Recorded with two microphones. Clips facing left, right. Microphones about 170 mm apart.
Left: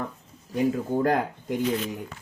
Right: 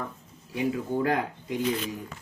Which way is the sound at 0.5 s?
45° left (ahead or behind).